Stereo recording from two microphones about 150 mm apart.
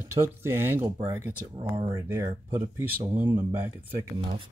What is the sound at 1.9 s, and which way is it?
Speech, 20° right (ahead or behind).